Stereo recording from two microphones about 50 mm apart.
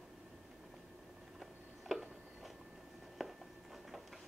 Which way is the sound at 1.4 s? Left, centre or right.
Centre.